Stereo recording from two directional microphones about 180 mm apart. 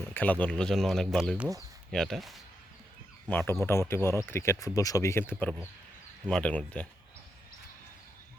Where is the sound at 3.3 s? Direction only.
10° left (ahead or behind).